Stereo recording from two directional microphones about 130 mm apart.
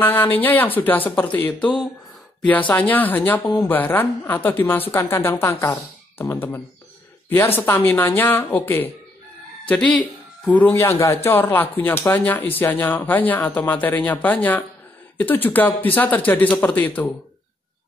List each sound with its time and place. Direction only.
0.0 s speech: 15° left (ahead or behind)